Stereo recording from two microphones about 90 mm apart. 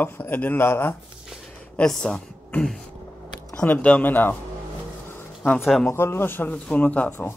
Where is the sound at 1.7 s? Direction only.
10° left (ahead or behind).